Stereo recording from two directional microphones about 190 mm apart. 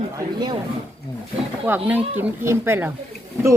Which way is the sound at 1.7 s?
10° right (ahead or behind).